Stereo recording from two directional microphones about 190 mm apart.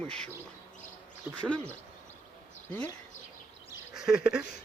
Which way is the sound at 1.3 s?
10° right (ahead or behind).